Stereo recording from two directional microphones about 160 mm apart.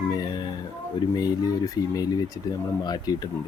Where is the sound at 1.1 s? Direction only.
25° left (ahead or behind).